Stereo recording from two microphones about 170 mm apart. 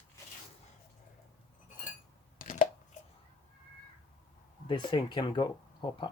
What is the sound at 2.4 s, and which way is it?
Chopping, 55° left (ahead or behind).